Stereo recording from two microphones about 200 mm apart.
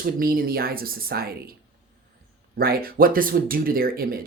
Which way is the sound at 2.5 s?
50° right (ahead or behind).